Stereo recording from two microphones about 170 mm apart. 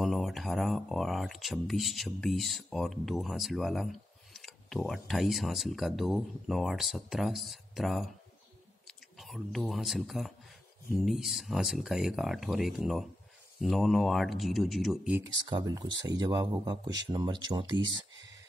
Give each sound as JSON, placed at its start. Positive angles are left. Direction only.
{"t": 0.0, "sound": "speech", "side_deg": 0}
{"t": 9.2, "sound": "speech", "side_deg": 0}
{"t": 15.5, "sound": "speech", "side_deg": -25}